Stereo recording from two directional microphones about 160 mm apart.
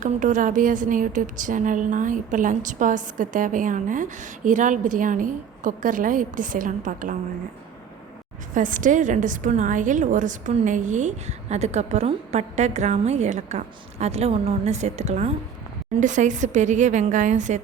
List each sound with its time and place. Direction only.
0.0 s a woman's voice: 55° right (ahead or behind)
8.5 s a woman's voice: 55° right (ahead or behind)